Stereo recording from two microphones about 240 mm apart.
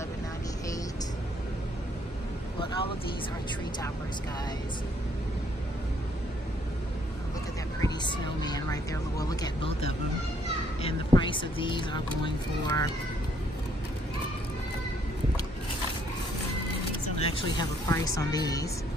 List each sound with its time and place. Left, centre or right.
2.6 s speech: left
7.8 s speech: centre
10.8 s speech: left
17.2 s speech: left